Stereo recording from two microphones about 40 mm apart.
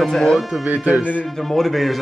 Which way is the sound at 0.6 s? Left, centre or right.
Right.